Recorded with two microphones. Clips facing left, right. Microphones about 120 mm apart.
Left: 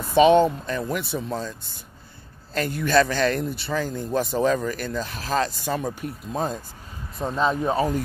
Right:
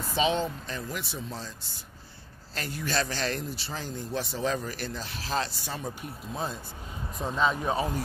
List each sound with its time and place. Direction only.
0.1 s speech: 60° left (ahead or behind)
2.5 s a man's voice: 55° left (ahead or behind)